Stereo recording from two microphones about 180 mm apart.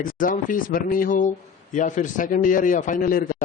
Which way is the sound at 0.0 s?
50° left (ahead or behind).